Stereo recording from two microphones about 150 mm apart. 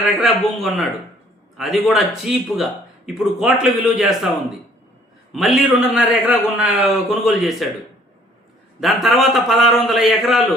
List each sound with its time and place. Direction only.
0.2 s a man's voice: centre (ahead or behind)
5.3 s a man's voice: centre (ahead or behind)
8.8 s a man's voice: centre (ahead or behind)